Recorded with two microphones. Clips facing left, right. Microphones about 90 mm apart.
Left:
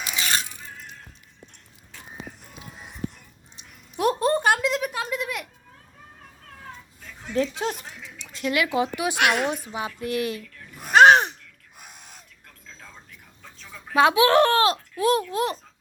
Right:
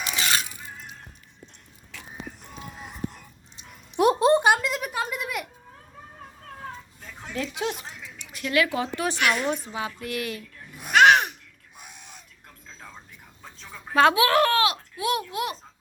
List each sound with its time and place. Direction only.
1.9 s biting: 90° right
3.9 s a sound: 10° right (ahead or behind)
7.3 s speech: 35° left (ahead or behind); by 9.1 s 15° left (ahead or behind)
9.1 s a woman's voice: 65° left (ahead or behind)
9.5 s speech: 20° left (ahead or behind)
10.8 s babbling: 35° left (ahead or behind)
13.4 s a sound: 25° right (ahead or behind)
13.9 s speech: 15° left (ahead or behind)
14.2 s speech: 30° left (ahead or behind)